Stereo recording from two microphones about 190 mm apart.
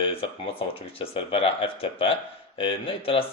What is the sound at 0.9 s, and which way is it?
Speech, 30° left (ahead or behind).